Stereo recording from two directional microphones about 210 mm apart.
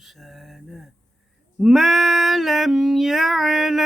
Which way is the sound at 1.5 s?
Centre (ahead or behind).